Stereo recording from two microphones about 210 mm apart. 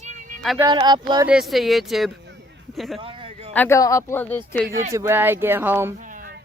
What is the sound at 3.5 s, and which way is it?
Speech, 10° left (ahead or behind).